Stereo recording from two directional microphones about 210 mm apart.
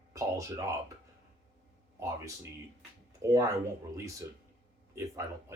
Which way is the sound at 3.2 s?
15° right (ahead or behind).